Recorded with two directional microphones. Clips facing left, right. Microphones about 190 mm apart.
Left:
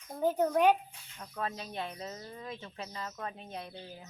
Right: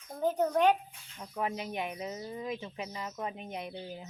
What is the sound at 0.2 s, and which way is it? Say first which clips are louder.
Speech: even; 10° left (ahead or behind).